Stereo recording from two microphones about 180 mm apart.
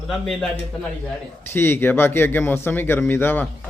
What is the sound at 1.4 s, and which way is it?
Speech, 15° left (ahead or behind).